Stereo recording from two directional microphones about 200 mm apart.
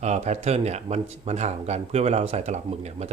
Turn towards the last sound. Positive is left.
turn(degrees=-35)  # may be behind; listen again after turning